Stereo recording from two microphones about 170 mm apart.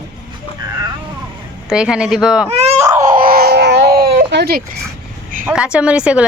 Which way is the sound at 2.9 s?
50° right (ahead or behind).